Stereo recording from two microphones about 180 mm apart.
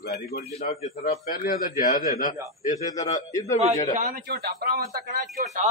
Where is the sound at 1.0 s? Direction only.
55° left (ahead or behind).